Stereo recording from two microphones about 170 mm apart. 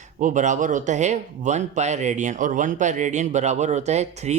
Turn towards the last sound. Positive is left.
turn(degrees=-40)  # may be behind; listen again after turning